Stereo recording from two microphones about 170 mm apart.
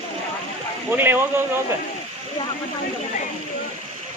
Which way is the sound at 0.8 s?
10° right (ahead or behind).